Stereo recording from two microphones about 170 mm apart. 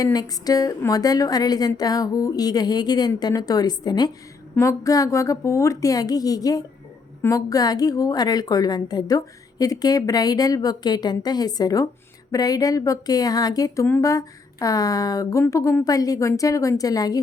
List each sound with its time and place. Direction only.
0.0 s a woman's voice: 20° left (ahead or behind)